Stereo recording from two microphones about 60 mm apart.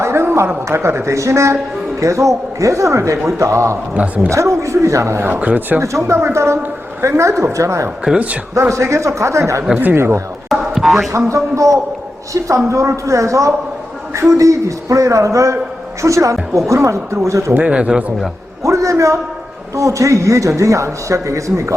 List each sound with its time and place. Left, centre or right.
0.0 s a woman's voice: right
3.9 s speech: right
4.3 s speech: right
5.2 s speech: right
6.1 s a woman's voice: right
8.1 s speech: centre
8.7 s speech: right
9.7 s a woman's voice: right
10.5 s boing: centre
11.3 s speech: right
12.6 s speech: right
17.5 s speech: right
18.6 s a sound: right
19.7 s speech: right